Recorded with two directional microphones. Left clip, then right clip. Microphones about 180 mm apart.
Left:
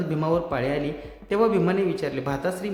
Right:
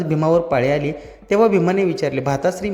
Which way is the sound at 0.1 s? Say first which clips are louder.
Right 9 dB; 30° right (ahead or behind).